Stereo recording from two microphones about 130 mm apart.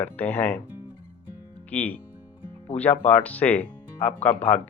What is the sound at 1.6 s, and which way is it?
Speech, 10° left (ahead or behind).